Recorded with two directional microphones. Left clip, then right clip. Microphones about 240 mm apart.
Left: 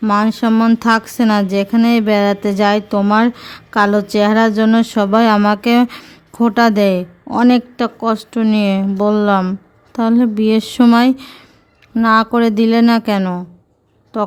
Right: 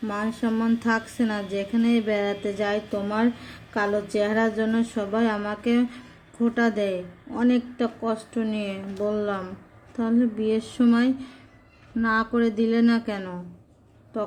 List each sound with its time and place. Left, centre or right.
0.0 s speech: left